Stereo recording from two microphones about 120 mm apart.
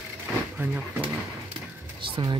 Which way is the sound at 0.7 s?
10° right (ahead or behind).